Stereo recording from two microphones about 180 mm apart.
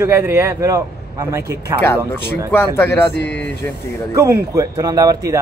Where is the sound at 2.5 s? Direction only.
10° left (ahead or behind).